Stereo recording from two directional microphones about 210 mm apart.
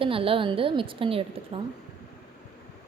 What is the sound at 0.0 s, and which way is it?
A woman's voice, 25° right (ahead or behind).